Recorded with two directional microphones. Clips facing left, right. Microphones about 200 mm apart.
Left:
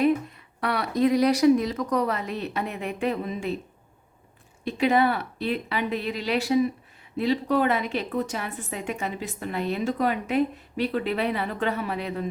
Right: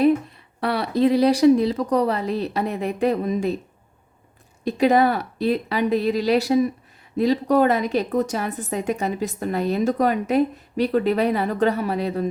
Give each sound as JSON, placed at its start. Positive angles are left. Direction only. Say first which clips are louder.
{"t": 0.6, "sound": "a woman's voice", "louder": "right 3 dB", "side_deg": -30}
{"t": 4.6, "sound": "a woman's voice", "louder": "right 4 dB", "side_deg": -40}